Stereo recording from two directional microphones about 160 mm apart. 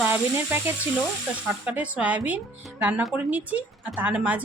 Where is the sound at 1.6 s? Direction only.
10° right (ahead or behind).